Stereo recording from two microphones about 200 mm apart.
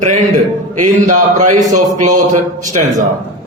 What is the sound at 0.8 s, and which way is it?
A man's voice, 40° right (ahead or behind).